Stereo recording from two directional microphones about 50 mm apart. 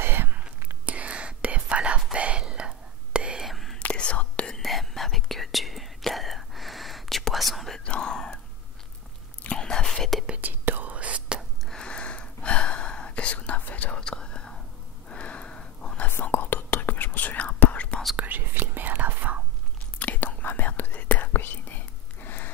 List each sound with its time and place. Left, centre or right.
0.0 s whispering: right
0.8 s whispering: right
3.3 s whispering: centre
3.9 s whispering: left
4.6 s whispering: centre
7.8 s whispering: centre
9.6 s whispering: centre
10.4 s whispering: right
11.7 s whispering: centre
15.0 s a sound: left
16.2 s whispering: left
18.1 s whispering: right
20.0 s whispering: left
21.3 s whispering: left